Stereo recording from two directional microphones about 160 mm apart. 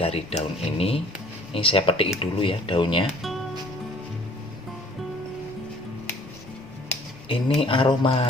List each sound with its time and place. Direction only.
0.0 s speech: 40° left (ahead or behind)
7.3 s speech: 30° left (ahead or behind)